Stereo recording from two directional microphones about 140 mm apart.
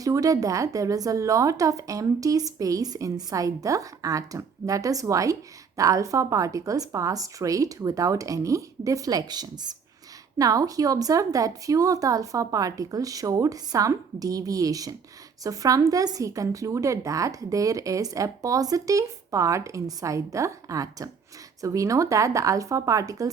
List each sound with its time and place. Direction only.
0.0 s a woman's voice: 25° right (ahead or behind)